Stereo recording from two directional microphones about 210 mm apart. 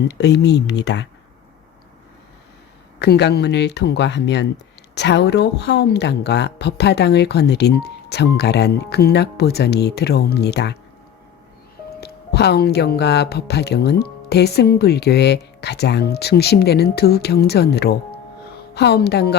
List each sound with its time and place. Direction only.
0.1 s speech: 55° left (ahead or behind)
3.0 s speech: 55° left (ahead or behind)
11.9 s speech: 50° left (ahead or behind)